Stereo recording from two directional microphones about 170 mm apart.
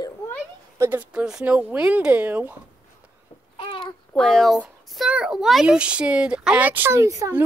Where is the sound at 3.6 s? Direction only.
30° left (ahead or behind).